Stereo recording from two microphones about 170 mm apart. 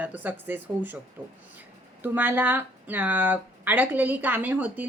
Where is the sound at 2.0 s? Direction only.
10° right (ahead or behind).